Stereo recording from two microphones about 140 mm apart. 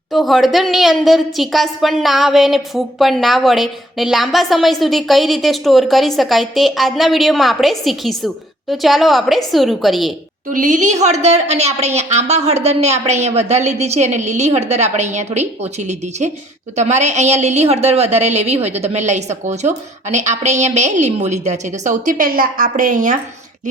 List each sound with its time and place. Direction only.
0.1 s a woman's voice: centre (ahead or behind)
10.5 s a woman's voice: 65° right (ahead or behind)
16.7 s a woman's voice: 55° right (ahead or behind); by 23.1 s 70° right (ahead or behind)